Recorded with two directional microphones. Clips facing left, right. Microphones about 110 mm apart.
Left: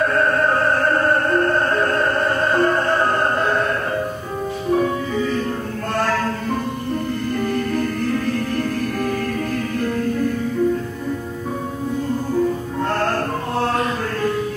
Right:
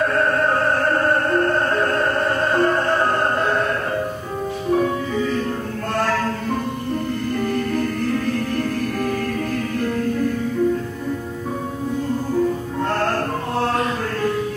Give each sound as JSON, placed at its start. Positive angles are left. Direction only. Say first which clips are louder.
{"t": 0.0, "sound": "opera", "louder": "left 1 dB", "side_deg": 20}
{"t": 4.7, "sound": "music", "louder": "even", "side_deg": 20}
{"t": 7.5, "sound": "music", "louder": "even", "side_deg": 20}
{"t": 12.8, "sound": "music", "louder": "even", "side_deg": 15}